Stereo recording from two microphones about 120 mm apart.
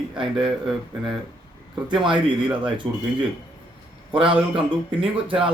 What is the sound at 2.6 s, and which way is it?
Speech, 45° right (ahead or behind).